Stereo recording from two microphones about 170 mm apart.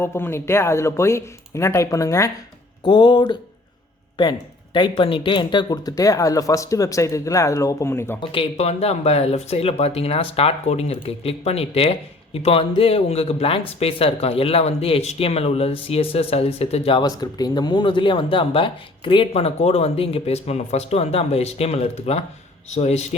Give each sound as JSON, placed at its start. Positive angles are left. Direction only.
{"t": 0.0, "sound": "speech", "side_deg": 15}
{"t": 8.2, "sound": "speech", "side_deg": 30}